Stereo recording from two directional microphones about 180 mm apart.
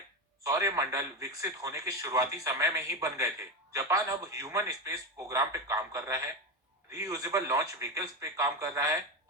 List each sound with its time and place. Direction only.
0.4 s a man's voice: 15° right (ahead or behind)